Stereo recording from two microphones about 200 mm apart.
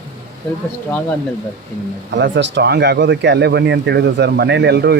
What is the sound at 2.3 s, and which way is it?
Speech, 60° right (ahead or behind).